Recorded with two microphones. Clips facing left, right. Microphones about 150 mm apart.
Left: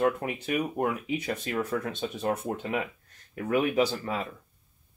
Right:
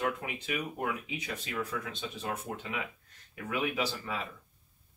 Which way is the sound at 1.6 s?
55° left (ahead or behind).